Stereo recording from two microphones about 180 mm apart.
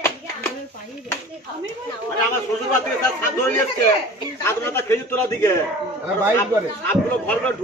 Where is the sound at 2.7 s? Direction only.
15° left (ahead or behind).